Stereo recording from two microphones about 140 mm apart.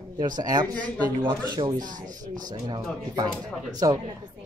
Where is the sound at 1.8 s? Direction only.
70° right (ahead or behind).